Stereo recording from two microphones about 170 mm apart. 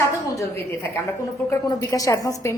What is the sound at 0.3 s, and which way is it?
A woman's voice, 15° left (ahead or behind).